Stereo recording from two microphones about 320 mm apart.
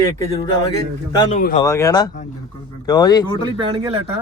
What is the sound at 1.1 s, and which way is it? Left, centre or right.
Speech, centre.